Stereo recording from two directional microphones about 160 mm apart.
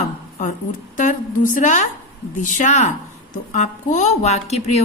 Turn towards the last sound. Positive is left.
turn(degrees=45)  # may be behind; listen again after turning